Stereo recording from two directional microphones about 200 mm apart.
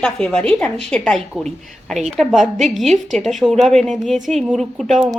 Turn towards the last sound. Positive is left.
turn(degrees=0)  # may be behind; listen again after turning